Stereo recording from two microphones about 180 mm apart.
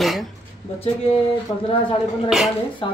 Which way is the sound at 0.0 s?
Centre (ahead or behind).